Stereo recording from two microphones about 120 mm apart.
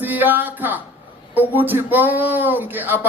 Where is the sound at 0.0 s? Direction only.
15° right (ahead or behind).